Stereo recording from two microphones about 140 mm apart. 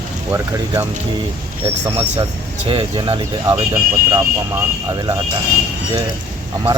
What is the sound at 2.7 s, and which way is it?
Speech, 40° right (ahead or behind).